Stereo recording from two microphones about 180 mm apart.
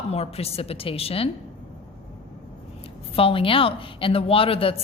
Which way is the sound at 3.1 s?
30° left (ahead or behind).